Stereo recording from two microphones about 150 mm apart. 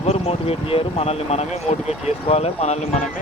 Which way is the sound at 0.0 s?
45° left (ahead or behind).